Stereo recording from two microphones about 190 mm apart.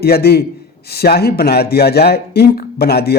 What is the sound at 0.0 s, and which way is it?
A man's voice, 55° left (ahead or behind).